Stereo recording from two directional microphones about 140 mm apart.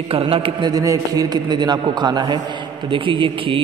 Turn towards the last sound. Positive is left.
turn(degrees=-40)  # may be behind; listen again after turning